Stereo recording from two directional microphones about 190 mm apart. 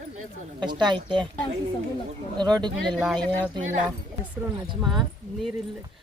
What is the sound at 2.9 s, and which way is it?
Speech, 5° right (ahead or behind).